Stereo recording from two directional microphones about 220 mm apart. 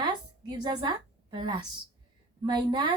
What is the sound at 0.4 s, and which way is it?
A woman's voice, 20° right (ahead or behind).